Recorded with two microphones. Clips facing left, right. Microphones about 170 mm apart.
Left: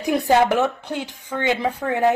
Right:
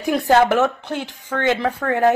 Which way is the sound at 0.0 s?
20° left (ahead or behind).